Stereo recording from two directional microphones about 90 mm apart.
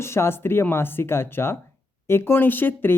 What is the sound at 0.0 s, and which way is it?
Speech, 30° left (ahead or behind).